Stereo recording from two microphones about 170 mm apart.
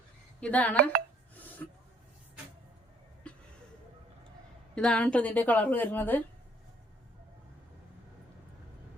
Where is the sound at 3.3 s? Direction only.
5° left (ahead or behind).